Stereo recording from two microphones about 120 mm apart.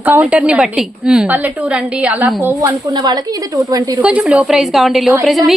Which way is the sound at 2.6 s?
35° right (ahead or behind).